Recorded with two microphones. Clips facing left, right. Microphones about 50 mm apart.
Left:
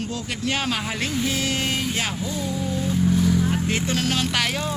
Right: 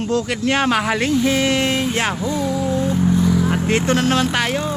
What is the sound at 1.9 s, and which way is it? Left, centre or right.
Speech, right.